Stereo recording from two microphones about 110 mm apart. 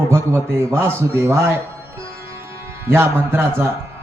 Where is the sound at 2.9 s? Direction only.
20° right (ahead or behind).